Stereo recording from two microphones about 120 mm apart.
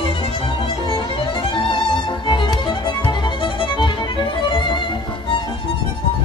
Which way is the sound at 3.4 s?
45° left (ahead or behind).